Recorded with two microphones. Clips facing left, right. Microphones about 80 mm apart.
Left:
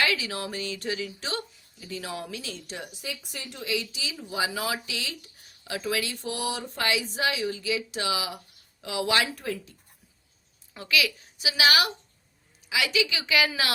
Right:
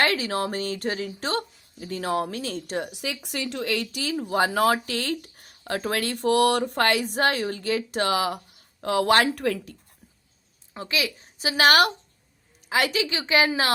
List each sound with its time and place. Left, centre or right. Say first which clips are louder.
0.0 s speech: right 4 dB; right
2.9 s speech: right 6 dB; right
9.4 s speech: right 7 dB; right
10.8 s a woman's voice: left 1 dB; right